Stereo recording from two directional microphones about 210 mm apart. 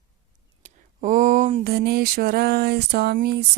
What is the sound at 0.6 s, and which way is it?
Speech, 35° right (ahead or behind).